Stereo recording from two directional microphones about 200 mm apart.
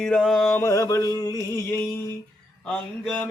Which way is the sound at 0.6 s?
15° left (ahead or behind).